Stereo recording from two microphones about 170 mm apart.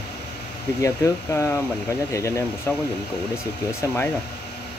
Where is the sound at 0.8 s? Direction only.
15° left (ahead or behind).